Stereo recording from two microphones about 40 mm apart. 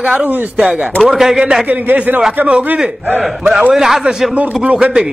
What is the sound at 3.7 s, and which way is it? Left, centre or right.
Speech, centre.